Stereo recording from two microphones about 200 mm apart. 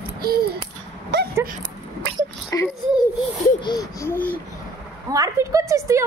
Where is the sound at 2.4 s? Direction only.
15° left (ahead or behind).